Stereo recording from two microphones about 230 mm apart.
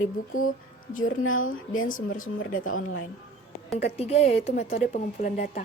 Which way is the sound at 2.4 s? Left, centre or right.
Left.